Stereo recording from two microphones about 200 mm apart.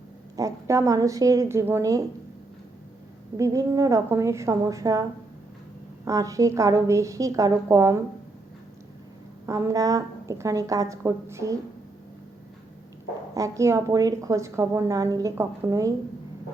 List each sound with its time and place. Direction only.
0.3 s a woman's voice: 15° right (ahead or behind)
3.3 s a woman's voice: 15° right (ahead or behind)
6.1 s a woman's voice: 15° right (ahead or behind)
9.5 s a woman's voice: 15° right (ahead or behind)
13.3 s a woman's voice: 15° right (ahead or behind)